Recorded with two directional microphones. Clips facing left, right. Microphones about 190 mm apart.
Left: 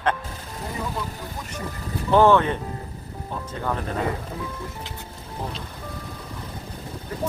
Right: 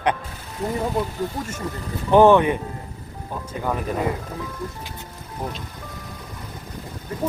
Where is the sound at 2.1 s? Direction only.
15° right (ahead or behind).